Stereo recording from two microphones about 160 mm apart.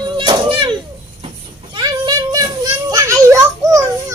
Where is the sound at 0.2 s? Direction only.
30° right (ahead or behind).